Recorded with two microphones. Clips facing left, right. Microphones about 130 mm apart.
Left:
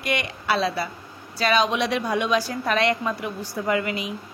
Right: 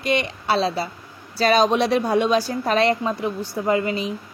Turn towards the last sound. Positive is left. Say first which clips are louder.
# right 3 dB
turn(degrees=-30)  # may be behind; listen again after turning